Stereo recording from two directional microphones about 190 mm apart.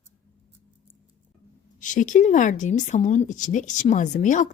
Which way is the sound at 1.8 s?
40° left (ahead or behind).